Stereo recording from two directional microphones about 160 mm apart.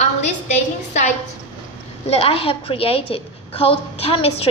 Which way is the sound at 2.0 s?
40° left (ahead or behind).